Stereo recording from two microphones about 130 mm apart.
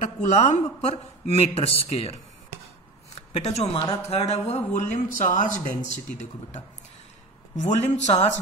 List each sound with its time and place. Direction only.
0.0 s a man's voice: 65° left (ahead or behind); by 2.1 s 45° left (ahead or behind)
3.2 s speech: 55° left (ahead or behind); by 5.9 s 75° left (ahead or behind)
7.5 s speech: 65° left (ahead or behind)